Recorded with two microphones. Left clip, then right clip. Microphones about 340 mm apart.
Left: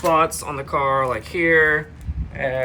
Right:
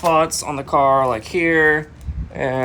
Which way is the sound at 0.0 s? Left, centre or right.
Centre.